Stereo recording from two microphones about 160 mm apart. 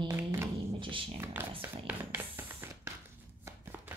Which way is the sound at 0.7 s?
30° right (ahead or behind).